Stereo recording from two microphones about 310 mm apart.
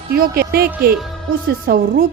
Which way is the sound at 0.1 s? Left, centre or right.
Right.